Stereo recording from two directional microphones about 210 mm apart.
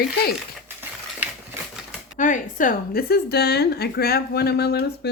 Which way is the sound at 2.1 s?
40° left (ahead or behind).